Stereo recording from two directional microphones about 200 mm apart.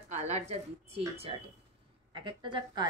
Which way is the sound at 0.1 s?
35° right (ahead or behind).